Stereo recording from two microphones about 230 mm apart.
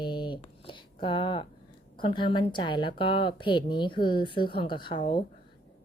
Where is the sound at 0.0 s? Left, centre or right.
Centre.